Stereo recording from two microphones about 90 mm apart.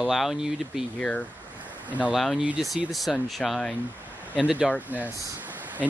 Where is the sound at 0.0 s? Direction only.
Centre (ahead or behind).